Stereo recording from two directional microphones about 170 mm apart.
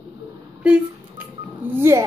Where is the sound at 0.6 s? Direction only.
10° right (ahead or behind).